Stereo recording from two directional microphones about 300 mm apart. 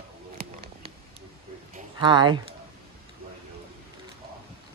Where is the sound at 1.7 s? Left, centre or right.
Centre.